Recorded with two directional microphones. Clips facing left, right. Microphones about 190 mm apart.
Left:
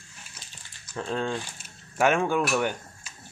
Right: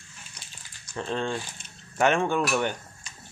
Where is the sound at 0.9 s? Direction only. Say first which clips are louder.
Even; 5° left (ahead or behind).